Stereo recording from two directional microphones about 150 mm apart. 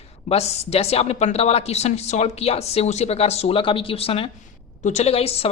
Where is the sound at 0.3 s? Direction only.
45° left (ahead or behind).